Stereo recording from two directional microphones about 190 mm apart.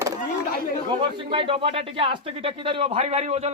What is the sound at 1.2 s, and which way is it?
A man's voice, 25° right (ahead or behind).